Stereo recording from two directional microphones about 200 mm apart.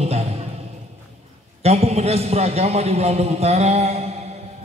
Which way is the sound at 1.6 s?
30° right (ahead or behind).